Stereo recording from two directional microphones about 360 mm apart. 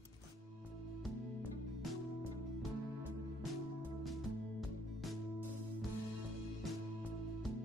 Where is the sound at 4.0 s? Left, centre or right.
Centre.